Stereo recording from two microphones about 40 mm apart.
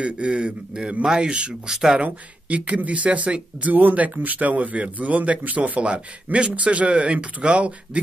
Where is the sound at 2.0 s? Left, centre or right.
Right.